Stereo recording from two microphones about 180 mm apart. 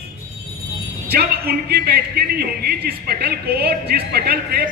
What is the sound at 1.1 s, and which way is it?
A man's voice, 60° right (ahead or behind).